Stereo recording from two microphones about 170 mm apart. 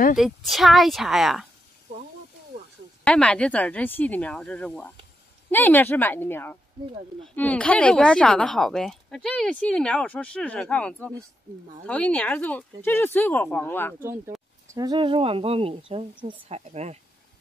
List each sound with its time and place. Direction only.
0.2 s a woman's voice: centre (ahead or behind)
3.0 s speech: 5° left (ahead or behind)
13.9 s speech: 15° right (ahead or behind); by 17.0 s 40° right (ahead or behind)